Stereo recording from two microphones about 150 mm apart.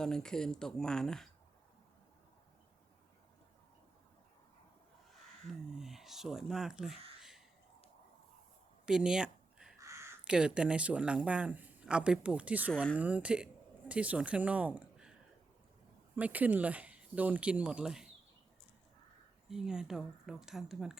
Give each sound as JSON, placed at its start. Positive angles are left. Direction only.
{"t": 0.0, "sound": "speech", "side_deg": 5}
{"t": 5.5, "sound": "speech", "side_deg": 0}
{"t": 8.9, "sound": "a sound", "side_deg": -5}
{"t": 9.8, "sound": "crow", "side_deg": -20}
{"t": 10.2, "sound": "speech", "side_deg": -5}
{"t": 12.7, "sound": "speech", "side_deg": 5}
{"t": 13.0, "sound": "a woman's voice", "side_deg": -10}
{"t": 16.1, "sound": "speech", "side_deg": -10}
{"t": 19.5, "sound": "speech", "side_deg": -5}